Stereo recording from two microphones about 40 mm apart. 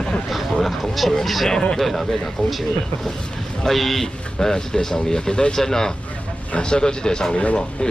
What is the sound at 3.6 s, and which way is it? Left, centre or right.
Speech, centre.